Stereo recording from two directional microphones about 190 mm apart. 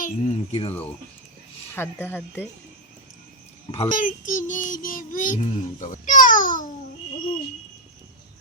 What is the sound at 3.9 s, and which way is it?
Music, 45° left (ahead or behind).